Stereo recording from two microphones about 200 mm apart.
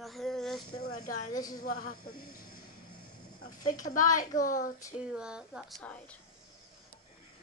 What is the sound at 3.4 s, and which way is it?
Speech, 40° left (ahead or behind).